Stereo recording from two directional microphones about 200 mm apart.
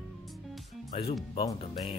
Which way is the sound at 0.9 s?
30° left (ahead or behind).